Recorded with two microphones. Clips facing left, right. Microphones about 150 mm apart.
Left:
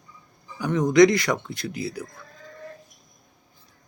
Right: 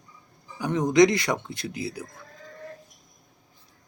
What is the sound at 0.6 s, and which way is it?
Speech, 20° right (ahead or behind).